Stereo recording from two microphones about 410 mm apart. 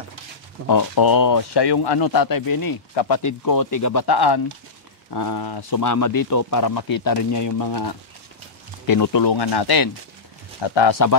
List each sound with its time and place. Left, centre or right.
0.7 s speech: left
2.9 s speech: left
3.2 s speech: left
4.0 s speech: left
5.8 s speech: left
10.6 s speech: left